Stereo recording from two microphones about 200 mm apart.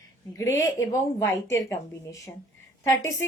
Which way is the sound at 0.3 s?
15° left (ahead or behind).